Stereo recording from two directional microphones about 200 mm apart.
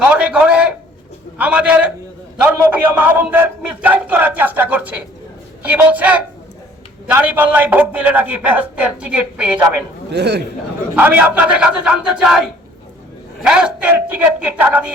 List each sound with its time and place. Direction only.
0.0 s a sound: 5° right (ahead or behind)
1.4 s a man's voice: 5° right (ahead or behind)
3.0 s a man's voice: 10° right (ahead or behind)
10.1 s speech: 55° right (ahead or behind)
10.9 s a man's voice: 10° right (ahead or behind)